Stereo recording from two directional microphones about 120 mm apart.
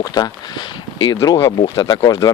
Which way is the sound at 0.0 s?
35° left (ahead or behind).